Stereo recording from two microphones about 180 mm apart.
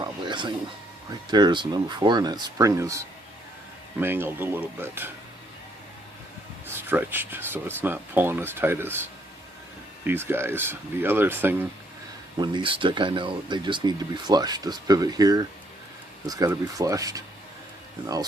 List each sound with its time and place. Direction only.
0.0 s a sound: 25° right (ahead or behind)
1.3 s speech: 25° right (ahead or behind)
4.0 s speech: 10° right (ahead or behind)
6.7 s speech: 10° right (ahead or behind)
12.4 s speech: 25° right (ahead or behind)